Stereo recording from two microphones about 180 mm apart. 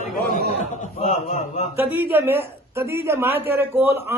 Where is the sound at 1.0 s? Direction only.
40° left (ahead or behind).